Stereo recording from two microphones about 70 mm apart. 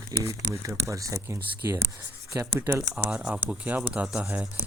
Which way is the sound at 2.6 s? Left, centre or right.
Right.